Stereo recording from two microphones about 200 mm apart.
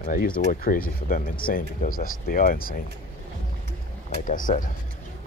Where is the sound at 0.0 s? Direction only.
45° left (ahead or behind).